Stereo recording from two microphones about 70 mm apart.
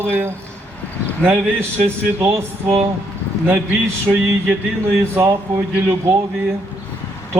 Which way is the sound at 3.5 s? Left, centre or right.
Right.